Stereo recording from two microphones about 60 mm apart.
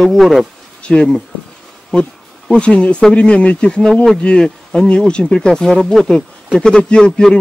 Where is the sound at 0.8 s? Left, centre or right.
Centre.